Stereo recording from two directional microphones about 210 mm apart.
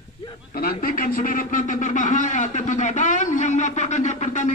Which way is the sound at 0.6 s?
45° left (ahead or behind).